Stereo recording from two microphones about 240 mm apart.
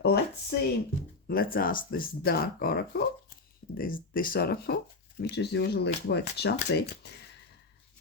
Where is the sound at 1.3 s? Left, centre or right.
Left.